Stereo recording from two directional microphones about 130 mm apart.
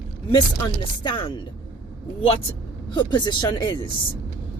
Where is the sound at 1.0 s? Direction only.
35° left (ahead or behind).